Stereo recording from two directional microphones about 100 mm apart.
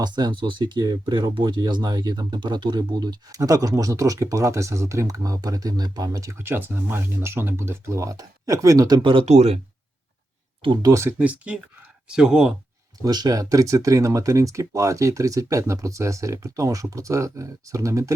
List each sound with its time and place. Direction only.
0.0 s speech: 45° right (ahead or behind)
6.5 s speech: 20° right (ahead or behind); by 9.0 s 40° right (ahead or behind)
9.0 s speech: 75° right (ahead or behind)
10.8 s speech: 30° right (ahead or behind)
11.2 s speech: 15° right (ahead or behind)
13.0 s speech: 40° right (ahead or behind)